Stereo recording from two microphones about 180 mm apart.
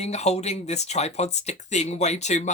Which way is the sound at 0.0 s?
35° left (ahead or behind).